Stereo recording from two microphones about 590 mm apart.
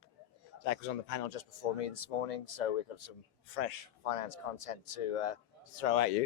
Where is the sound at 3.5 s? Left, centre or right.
Left.